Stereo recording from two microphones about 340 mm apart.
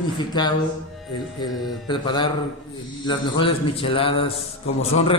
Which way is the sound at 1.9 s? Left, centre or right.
Centre.